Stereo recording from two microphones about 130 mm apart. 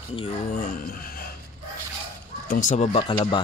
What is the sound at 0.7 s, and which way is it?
Speech, 90° left.